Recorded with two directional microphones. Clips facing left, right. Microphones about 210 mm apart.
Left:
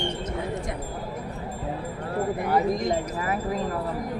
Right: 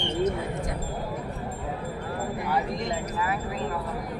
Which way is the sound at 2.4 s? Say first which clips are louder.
Left 5 dB; 45° left (ahead or behind).